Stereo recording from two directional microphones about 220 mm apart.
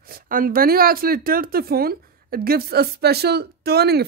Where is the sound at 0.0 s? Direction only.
40° right (ahead or behind).